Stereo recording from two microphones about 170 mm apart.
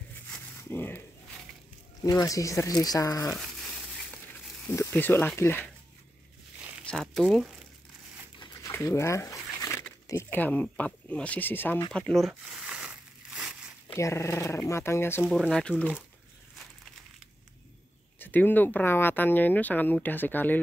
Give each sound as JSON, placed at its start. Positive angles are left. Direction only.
{"t": 0.6, "sound": "speech", "side_deg": 10}
{"t": 2.0, "sound": "speech", "side_deg": 20}
{"t": 4.6, "sound": "speech", "side_deg": 10}
{"t": 6.9, "sound": "speech", "side_deg": 0}
{"t": 8.4, "sound": "a sound", "side_deg": 25}
{"t": 8.7, "sound": "a sound", "side_deg": 15}
{"t": 10.0, "sound": "speech", "side_deg": 15}
{"t": 11.9, "sound": "a sound", "side_deg": 5}
{"t": 13.9, "sound": "speech", "side_deg": 15}
{"t": 15.2, "sound": "speech", "side_deg": 0}
{"t": 18.2, "sound": "speech", "side_deg": 10}